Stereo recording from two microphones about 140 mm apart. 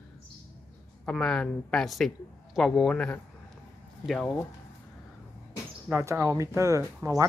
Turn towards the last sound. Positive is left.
turn(degrees=-20)  # may be behind; listen again after turning